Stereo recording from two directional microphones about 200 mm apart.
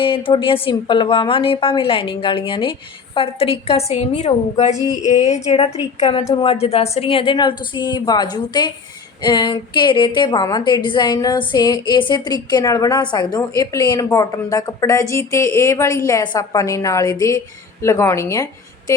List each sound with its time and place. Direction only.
0.0 s a woman's voice: 25° left (ahead or behind)